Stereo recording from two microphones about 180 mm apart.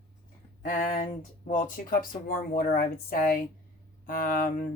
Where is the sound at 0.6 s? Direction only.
50° left (ahead or behind).